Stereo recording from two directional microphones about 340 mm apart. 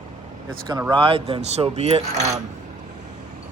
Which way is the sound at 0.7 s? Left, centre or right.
Centre.